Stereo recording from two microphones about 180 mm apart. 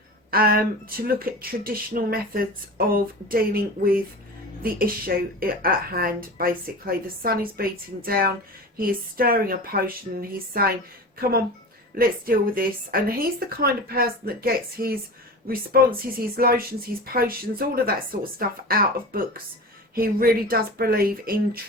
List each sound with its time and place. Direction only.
0.3 s speech: 55° right (ahead or behind)